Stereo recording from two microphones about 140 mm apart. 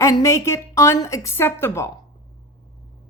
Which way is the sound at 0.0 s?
20° left (ahead or behind).